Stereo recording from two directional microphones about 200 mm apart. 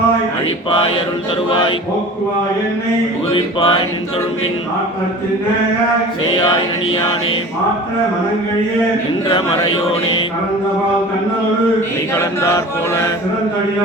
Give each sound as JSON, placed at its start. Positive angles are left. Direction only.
{"t": 1.5, "sound": "music", "side_deg": 25}
{"t": 3.3, "sound": "music", "side_deg": 25}
{"t": 9.3, "sound": "music", "side_deg": 25}
{"t": 12.1, "sound": "chant", "side_deg": 15}